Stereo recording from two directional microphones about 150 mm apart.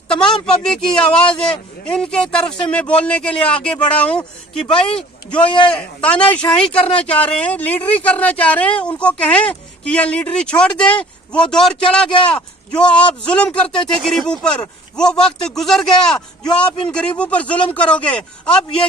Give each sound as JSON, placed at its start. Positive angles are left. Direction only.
{"t": 0.1, "sound": "a man's voice", "side_deg": 5}
{"t": 5.5, "sound": "a man's voice", "side_deg": 35}
{"t": 5.7, "sound": "a man's voice", "side_deg": 5}